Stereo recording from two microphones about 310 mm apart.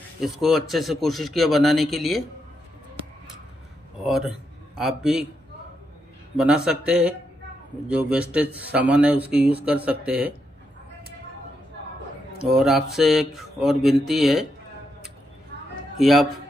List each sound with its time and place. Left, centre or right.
0.2 s a man's voice: centre
4.0 s speech: centre
6.3 s a man's voice: centre
12.4 s a man's voice: centre
16.0 s a man's voice: centre